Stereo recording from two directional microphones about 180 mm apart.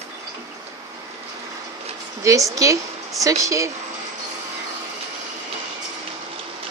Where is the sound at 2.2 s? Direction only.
20° right (ahead or behind).